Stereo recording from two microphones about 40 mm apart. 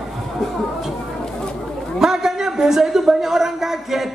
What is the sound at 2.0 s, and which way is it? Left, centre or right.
A man's voice, centre.